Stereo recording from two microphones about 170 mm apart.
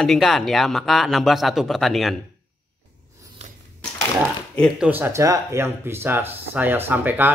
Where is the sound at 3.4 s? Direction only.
40° right (ahead or behind).